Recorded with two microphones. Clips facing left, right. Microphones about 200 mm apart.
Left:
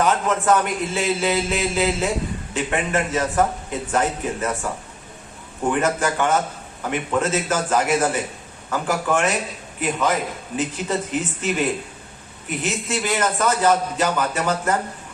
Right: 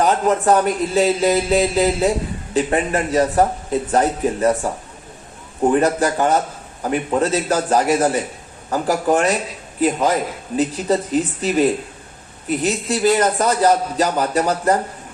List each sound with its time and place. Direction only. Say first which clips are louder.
0.0 s a man's voice: right 4 dB; 35° right (ahead or behind)
5.7 s a man's voice: right 3 dB; 35° right (ahead or behind)